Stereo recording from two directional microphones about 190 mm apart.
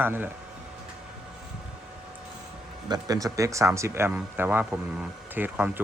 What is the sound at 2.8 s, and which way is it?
Speech, 20° right (ahead or behind).